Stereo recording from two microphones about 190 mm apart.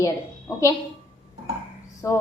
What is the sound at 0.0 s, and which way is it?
Speech, 15° left (ahead or behind).